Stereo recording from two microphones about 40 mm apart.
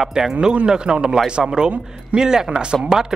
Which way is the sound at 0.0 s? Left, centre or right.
Centre.